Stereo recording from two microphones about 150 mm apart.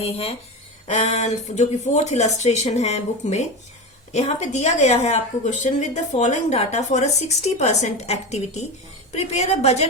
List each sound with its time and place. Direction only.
0.0 s a woman's voice: 45° left (ahead or behind)